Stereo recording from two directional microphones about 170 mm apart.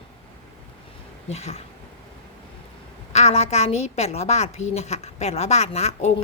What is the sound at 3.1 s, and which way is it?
A woman's voice, 40° left (ahead or behind).